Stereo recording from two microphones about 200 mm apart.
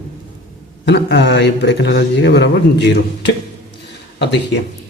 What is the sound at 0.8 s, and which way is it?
A man's voice, 60° left (ahead or behind).